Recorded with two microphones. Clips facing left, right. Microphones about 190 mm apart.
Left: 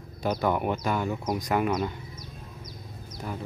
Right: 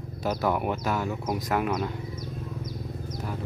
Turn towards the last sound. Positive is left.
turn(degrees=-55)  # may be behind; listen again after turning